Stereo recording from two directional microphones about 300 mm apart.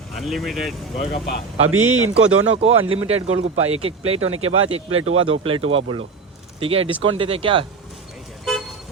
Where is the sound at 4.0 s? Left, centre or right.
Right.